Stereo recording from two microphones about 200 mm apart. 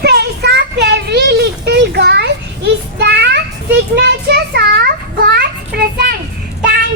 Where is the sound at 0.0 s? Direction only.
55° right (ahead or behind).